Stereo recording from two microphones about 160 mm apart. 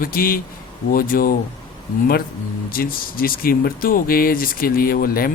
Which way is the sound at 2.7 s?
65° left (ahead or behind).